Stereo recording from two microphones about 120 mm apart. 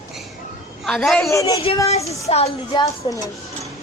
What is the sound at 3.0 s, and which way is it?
Speech, 40° left (ahead or behind).